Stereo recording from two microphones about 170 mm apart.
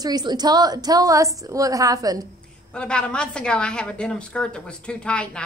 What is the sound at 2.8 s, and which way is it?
A woman's voice, 5° left (ahead or behind).